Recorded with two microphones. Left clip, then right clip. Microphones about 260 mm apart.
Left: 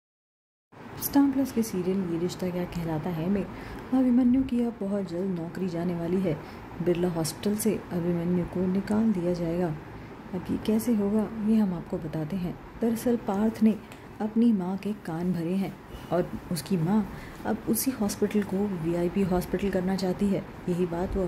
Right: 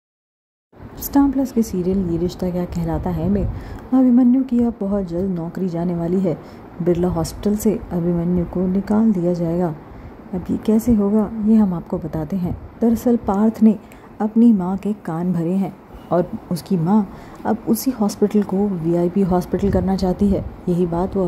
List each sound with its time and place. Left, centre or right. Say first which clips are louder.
1.0 s a woman's voice: right 7 dB; centre